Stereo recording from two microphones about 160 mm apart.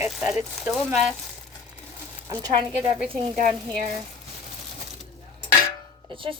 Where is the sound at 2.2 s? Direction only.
20° right (ahead or behind).